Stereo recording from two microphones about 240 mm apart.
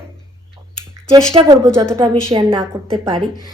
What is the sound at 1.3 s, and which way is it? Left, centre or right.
Speech, right.